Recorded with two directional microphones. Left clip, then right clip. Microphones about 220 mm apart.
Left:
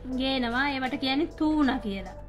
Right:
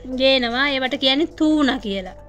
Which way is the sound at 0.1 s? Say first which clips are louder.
Right 11 dB; 50° right (ahead or behind).